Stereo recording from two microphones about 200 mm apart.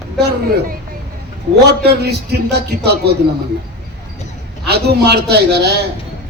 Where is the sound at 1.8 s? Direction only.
55° right (ahead or behind).